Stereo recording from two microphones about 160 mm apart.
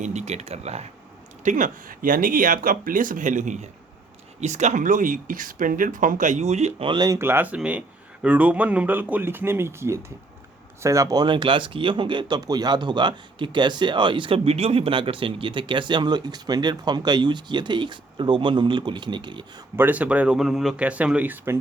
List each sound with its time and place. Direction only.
0.0 s speech: 45° right (ahead or behind)
1.5 s speech: 55° right (ahead or behind); by 19.6 s 30° right (ahead or behind)
19.7 s speech: 10° right (ahead or behind)